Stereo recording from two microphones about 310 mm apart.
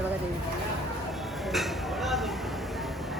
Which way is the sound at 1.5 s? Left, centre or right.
Centre.